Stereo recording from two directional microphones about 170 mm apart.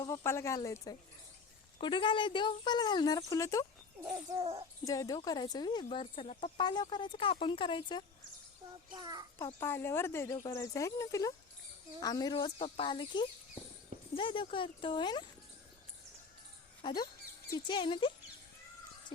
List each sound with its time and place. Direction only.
0.0 s speech: 20° left (ahead or behind)
4.4 s speech: 35° right (ahead or behind)
4.9 s speech: 20° left (ahead or behind)
9.0 s a child's voice: 25° right (ahead or behind)
9.4 s speech: 15° left (ahead or behind)
16.8 s speech: 25° left (ahead or behind)